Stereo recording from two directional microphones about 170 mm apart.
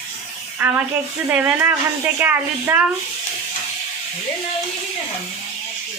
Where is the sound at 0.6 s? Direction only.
10° right (ahead or behind).